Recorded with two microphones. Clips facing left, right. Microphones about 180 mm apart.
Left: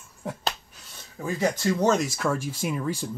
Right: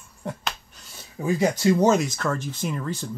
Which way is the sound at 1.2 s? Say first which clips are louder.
Right 4 dB; 15° right (ahead or behind).